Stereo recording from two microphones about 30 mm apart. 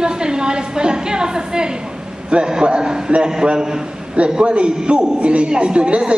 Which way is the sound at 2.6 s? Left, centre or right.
Right.